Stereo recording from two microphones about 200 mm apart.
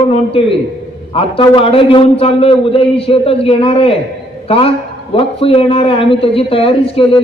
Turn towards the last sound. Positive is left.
turn(degrees=25)  # may be behind; listen again after turning